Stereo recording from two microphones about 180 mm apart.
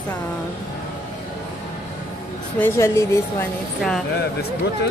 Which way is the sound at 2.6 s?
15° left (ahead or behind).